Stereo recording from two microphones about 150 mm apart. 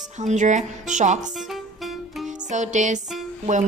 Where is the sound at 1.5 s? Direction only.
Centre (ahead or behind).